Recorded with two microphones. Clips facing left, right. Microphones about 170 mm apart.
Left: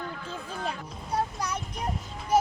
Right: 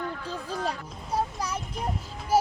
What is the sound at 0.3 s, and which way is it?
Speech, 35° right (ahead or behind).